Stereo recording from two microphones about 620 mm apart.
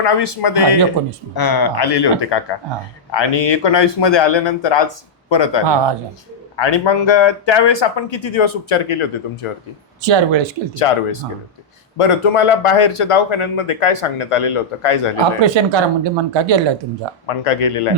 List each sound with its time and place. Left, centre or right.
0.0 s speech: left
5.6 s speech: right
6.6 s speech: left
10.0 s speech: right
10.8 s speech: left
15.4 s speech: right
17.2 s speech: left